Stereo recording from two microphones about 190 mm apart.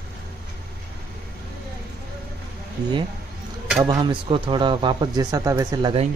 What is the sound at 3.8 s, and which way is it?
Speech, 25° right (ahead or behind).